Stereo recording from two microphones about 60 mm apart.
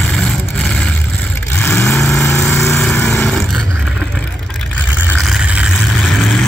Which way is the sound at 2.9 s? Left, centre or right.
Left.